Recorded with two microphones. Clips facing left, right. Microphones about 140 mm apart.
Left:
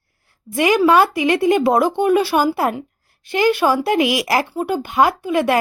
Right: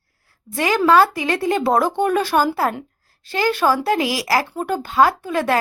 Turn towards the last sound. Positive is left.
turn(degrees=15)  # may be behind; listen again after turning